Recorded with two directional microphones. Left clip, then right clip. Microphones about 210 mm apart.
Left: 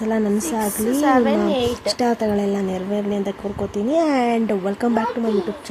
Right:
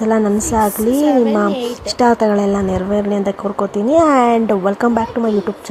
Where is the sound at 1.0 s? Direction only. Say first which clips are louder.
Right 2 dB; 20° right (ahead or behind).